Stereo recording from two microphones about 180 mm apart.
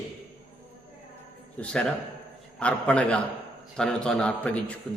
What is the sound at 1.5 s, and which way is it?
A man's voice, 5° left (ahead or behind).